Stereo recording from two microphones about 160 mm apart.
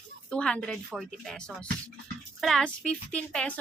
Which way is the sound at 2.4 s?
5° left (ahead or behind).